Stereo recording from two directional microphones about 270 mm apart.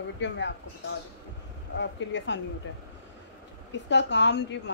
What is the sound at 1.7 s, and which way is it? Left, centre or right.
Speech, left.